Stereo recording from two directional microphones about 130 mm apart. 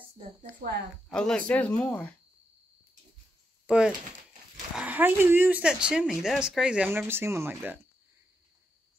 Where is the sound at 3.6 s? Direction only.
5° right (ahead or behind).